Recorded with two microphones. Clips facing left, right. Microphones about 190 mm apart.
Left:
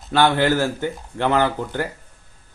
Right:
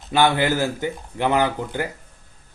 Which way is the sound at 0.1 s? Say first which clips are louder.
Left 1 dB; 10° right (ahead or behind).